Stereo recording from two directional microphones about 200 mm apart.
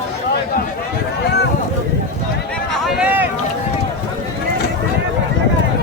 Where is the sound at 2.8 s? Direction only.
5° right (ahead or behind).